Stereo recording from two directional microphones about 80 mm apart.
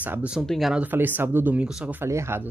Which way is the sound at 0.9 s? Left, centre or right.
Right.